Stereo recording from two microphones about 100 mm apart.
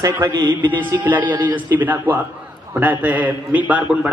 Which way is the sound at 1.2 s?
50° right (ahead or behind).